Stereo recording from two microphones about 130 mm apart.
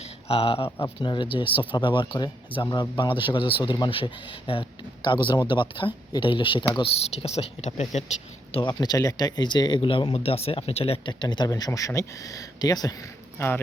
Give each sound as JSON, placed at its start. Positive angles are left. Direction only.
{"t": 0.3, "sound": "a man's voice", "side_deg": 45}
{"t": 3.1, "sound": "speech", "side_deg": 40}
{"t": 6.9, "sound": "speech", "side_deg": 50}
{"t": 8.5, "sound": "speech", "side_deg": 35}